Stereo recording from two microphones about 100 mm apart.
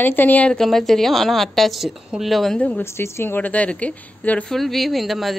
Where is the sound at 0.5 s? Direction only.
Centre (ahead or behind).